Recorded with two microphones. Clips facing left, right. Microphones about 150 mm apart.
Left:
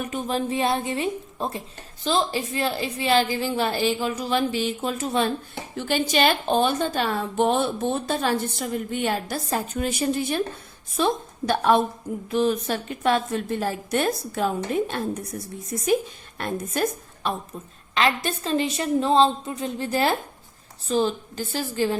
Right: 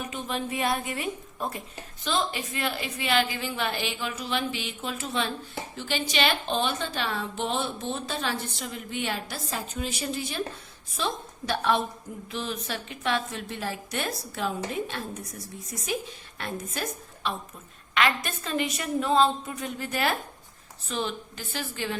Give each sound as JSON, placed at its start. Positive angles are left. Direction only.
{"t": 0.1, "sound": "a woman's voice", "side_deg": 40}
{"t": 17.9, "sound": "a woman's voice", "side_deg": 30}